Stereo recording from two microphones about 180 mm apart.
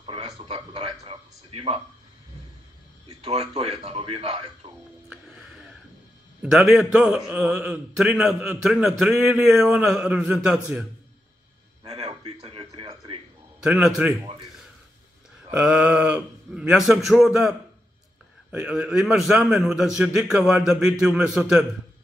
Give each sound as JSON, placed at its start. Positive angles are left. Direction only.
{"t": 0.0, "sound": "a man's voice", "side_deg": -30}
{"t": 3.1, "sound": "a man's voice", "side_deg": -35}
{"t": 5.1, "sound": "music", "side_deg": 0}
{"t": 6.4, "sound": "a man's voice", "side_deg": 0}
{"t": 11.8, "sound": "a sound", "side_deg": -35}
{"t": 13.7, "sound": "a man's voice", "side_deg": -5}
{"t": 15.5, "sound": "a man's voice", "side_deg": -5}